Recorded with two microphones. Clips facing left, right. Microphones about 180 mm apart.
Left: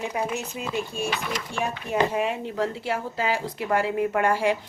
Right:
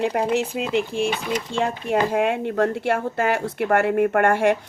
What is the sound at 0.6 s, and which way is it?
Speech, 90° right.